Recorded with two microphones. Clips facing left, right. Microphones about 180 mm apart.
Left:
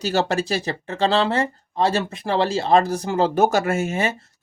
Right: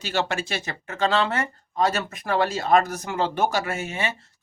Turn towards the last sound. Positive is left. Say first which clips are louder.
# left 7 dB
turn(degrees=40)  # may be behind; listen again after turning